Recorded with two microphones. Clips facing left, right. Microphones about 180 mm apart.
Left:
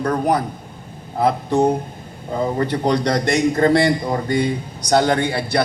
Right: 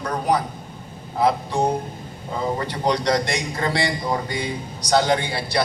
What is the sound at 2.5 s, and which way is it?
A man's voice, 50° left (ahead or behind).